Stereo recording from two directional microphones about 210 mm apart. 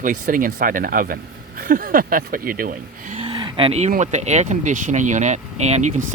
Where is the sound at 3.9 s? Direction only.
35° right (ahead or behind).